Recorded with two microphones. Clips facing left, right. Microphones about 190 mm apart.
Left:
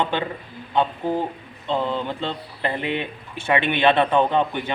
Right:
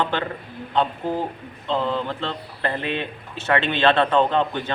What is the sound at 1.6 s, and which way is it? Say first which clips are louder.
Speech: even; 15° left (ahead or behind).